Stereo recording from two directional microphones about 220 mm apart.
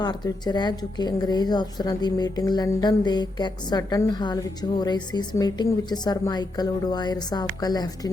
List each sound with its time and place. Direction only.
0.0 s a woman's voice: 20° left (ahead or behind)